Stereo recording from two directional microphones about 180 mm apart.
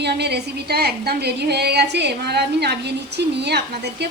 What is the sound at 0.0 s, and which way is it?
A woman's voice, 70° right (ahead or behind).